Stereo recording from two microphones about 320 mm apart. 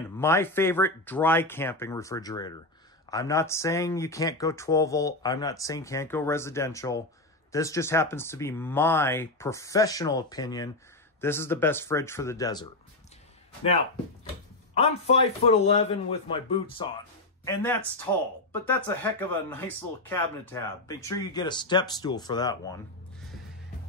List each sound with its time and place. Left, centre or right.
0.2 s speech: centre
14.7 s a man's voice: centre